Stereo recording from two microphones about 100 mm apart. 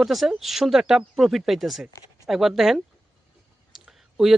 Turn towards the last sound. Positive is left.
turn(degrees=-5)  # may be behind; listen again after turning